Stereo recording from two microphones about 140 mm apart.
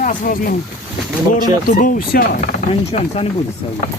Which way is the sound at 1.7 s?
75° left (ahead or behind).